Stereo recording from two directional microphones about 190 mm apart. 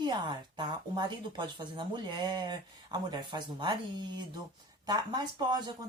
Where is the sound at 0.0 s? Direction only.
25° right (ahead or behind).